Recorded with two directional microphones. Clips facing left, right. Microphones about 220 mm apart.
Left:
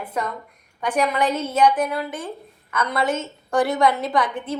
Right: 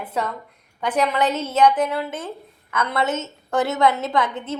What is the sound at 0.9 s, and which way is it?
Speech, 10° left (ahead or behind).